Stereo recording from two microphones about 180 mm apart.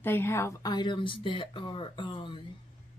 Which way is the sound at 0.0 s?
10° left (ahead or behind).